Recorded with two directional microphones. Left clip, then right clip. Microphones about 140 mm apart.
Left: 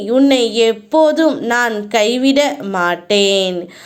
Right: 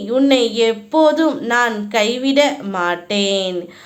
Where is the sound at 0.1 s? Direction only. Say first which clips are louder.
Left 2 dB; 35° left (ahead or behind).